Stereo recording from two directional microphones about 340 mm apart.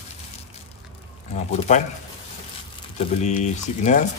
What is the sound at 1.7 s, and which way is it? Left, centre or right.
Speech, centre.